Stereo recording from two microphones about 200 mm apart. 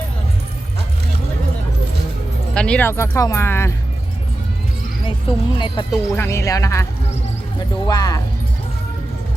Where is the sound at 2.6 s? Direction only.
5° left (ahead or behind).